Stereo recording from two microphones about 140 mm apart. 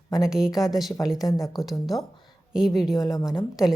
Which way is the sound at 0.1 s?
5° right (ahead or behind).